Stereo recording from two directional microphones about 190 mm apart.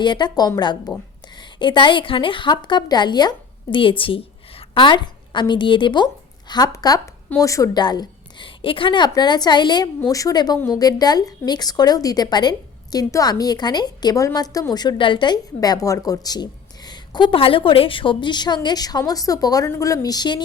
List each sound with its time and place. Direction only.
0.0 s a woman's voice: 25° left (ahead or behind)